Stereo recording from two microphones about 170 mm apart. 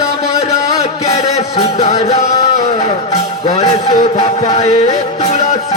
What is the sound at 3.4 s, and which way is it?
Music, 45° left (ahead or behind).